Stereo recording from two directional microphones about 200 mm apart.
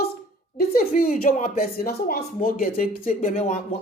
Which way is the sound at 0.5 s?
50° left (ahead or behind).